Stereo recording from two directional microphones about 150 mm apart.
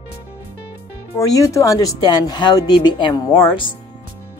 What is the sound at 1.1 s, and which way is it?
Speech, 20° left (ahead or behind).